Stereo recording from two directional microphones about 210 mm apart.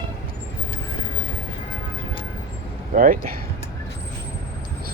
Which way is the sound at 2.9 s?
40° right (ahead or behind).